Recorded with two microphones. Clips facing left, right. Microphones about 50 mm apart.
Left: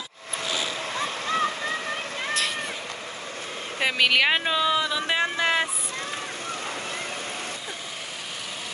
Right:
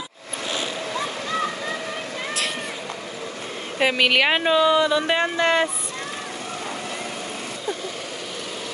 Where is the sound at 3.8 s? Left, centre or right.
Centre.